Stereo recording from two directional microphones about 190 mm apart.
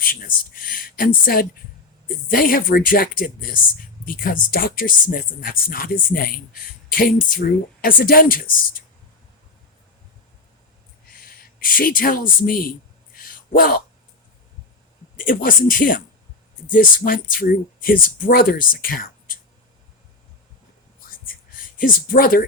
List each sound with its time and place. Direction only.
0.0 s speech: 50° left (ahead or behind)
11.2 s speech: 50° left (ahead or behind)
13.1 s a sound: 50° left (ahead or behind)
15.1 s speech: 45° left (ahead or behind)
21.8 s speech: 45° left (ahead or behind)